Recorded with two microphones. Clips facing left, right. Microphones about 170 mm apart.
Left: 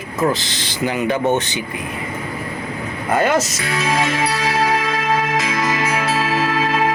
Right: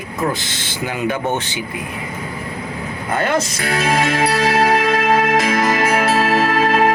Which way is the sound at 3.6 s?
55° right (ahead or behind).